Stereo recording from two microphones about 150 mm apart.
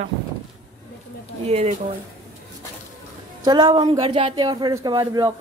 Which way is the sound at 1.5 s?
45° right (ahead or behind).